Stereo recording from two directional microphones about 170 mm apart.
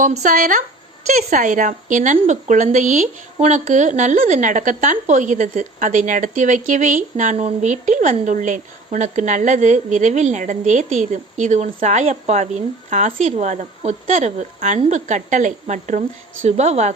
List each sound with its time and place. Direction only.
0.0 s speech: 45° right (ahead or behind)